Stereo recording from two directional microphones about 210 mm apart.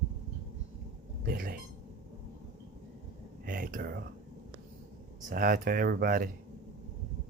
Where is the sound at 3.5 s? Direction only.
45° right (ahead or behind).